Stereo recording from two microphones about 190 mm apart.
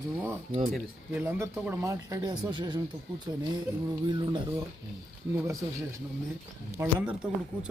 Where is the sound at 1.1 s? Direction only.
10° right (ahead or behind).